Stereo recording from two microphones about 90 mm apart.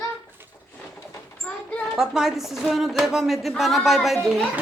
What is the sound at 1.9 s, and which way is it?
A woman's voice, 5° right (ahead or behind).